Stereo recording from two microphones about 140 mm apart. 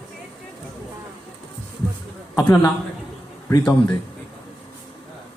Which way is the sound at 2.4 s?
15° left (ahead or behind).